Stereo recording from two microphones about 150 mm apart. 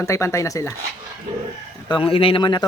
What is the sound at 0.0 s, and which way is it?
Speech, 20° left (ahead or behind).